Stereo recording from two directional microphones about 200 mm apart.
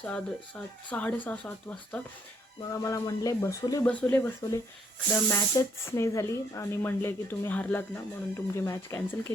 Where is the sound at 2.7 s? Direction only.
15° left (ahead or behind).